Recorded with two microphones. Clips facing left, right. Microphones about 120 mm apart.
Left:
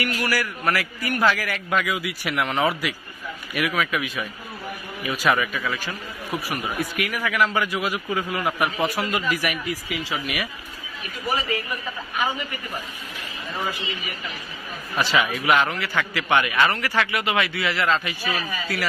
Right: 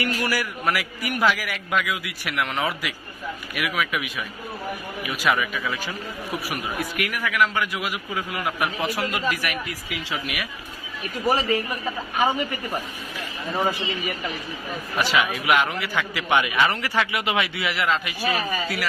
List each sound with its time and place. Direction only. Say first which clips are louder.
0.0 s a man's voice: even; 20° right (ahead or behind); by 10.5 s centre (ahead or behind)
11.2 s speech: right 4 dB; 35° right (ahead or behind)
12.2 s a man's voice: right 4 dB; 25° right (ahead or behind)
15.0 s a man's voice: left 1 dB; 5° right (ahead or behind)
18.2 s speech: right 3 dB; 40° right (ahead or behind)